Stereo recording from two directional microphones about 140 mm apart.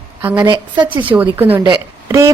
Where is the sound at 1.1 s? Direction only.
15° right (ahead or behind).